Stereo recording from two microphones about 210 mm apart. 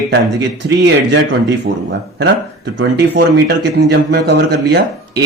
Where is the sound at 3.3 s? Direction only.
55° right (ahead or behind).